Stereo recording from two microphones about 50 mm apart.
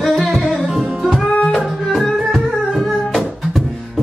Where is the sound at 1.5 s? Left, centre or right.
Centre.